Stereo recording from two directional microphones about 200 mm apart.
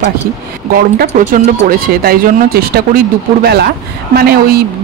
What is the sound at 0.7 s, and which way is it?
Speech, 45° right (ahead or behind).